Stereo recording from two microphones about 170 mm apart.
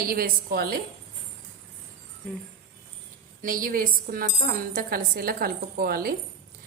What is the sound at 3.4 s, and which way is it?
Speech, 55° right (ahead or behind).